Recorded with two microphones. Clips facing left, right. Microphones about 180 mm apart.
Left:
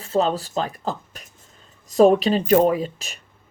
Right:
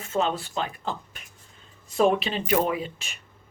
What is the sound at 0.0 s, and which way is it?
Speech, 35° left (ahead or behind).